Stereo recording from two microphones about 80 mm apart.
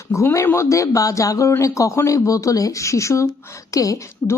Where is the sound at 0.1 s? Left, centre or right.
Left.